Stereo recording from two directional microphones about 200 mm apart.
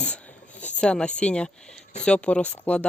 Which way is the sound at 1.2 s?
5° left (ahead or behind).